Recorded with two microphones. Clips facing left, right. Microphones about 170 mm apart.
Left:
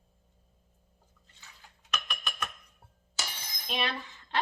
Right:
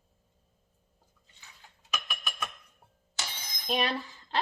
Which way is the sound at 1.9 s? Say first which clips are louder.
Left 1 dB; 5° right (ahead or behind).